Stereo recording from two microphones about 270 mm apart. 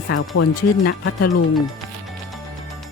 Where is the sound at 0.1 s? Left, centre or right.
Left.